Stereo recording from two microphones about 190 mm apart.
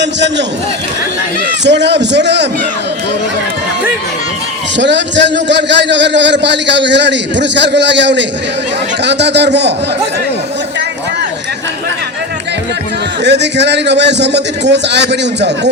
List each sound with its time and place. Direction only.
0.0 s speech: 65° right (ahead or behind)
1.6 s a man's voice: 65° right (ahead or behind)
4.8 s a man's voice: 70° right (ahead or behind)
13.2 s a man's voice: 65° right (ahead or behind)